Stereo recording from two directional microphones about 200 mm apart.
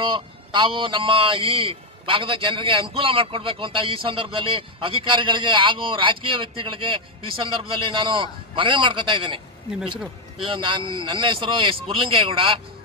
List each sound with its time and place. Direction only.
0.1 s a man's voice: 25° right (ahead or behind)
10.4 s a man's voice: 25° right (ahead or behind)